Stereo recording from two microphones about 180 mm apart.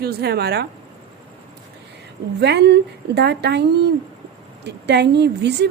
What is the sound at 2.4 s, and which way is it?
A woman's voice, 70° right (ahead or behind).